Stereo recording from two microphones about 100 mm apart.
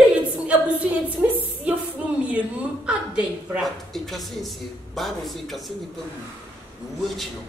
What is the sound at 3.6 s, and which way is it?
A man's voice, centre (ahead or behind).